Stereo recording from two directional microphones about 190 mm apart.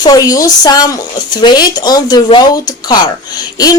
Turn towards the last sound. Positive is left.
turn(degrees=20)  # may be behind; listen again after turning